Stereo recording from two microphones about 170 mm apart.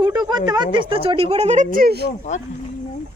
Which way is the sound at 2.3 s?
45° left (ahead or behind).